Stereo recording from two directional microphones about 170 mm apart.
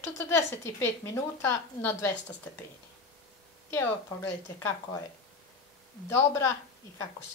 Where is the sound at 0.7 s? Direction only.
15° left (ahead or behind).